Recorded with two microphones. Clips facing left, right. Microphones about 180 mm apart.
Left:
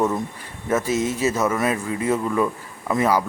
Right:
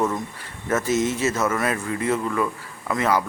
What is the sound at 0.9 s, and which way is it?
Speech, 35° left (ahead or behind).